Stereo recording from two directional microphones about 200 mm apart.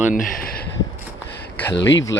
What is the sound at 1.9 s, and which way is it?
Speech, 65° left (ahead or behind).